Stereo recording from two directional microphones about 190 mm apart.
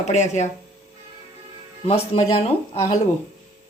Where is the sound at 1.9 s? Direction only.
30° left (ahead or behind).